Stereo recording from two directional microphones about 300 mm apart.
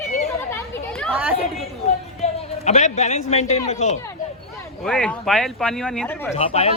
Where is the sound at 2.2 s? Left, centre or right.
Left.